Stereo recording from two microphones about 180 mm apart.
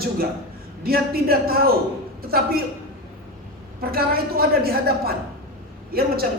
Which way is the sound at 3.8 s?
55° right (ahead or behind).